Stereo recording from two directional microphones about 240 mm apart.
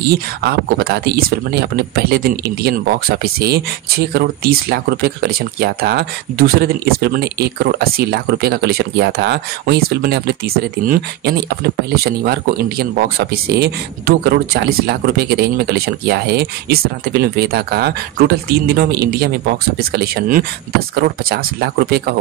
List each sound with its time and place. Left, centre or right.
0.1 s speech: right